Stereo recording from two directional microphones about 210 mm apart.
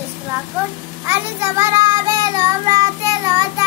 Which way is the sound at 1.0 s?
15° right (ahead or behind).